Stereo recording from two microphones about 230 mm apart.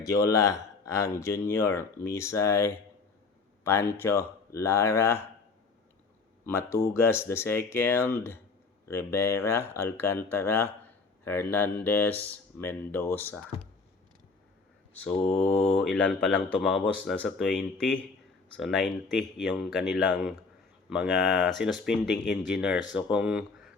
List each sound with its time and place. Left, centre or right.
0.0 s speech: centre
6.4 s speech: centre
15.3 s mantra: left
15.6 s speech: centre